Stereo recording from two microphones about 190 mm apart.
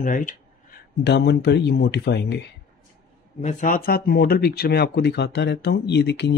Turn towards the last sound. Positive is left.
turn(degrees=65)  # may be behind; listen again after turning